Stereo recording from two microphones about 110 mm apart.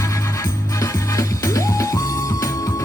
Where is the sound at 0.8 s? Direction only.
30° left (ahead or behind).